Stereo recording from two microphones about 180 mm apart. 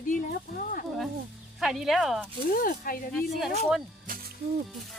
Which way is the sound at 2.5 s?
50° left (ahead or behind).